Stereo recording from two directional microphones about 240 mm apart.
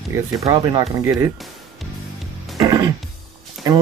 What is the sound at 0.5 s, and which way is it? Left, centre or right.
Speech, centre.